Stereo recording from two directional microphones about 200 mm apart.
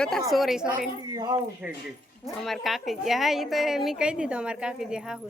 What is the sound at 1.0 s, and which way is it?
Speech, 20° right (ahead or behind).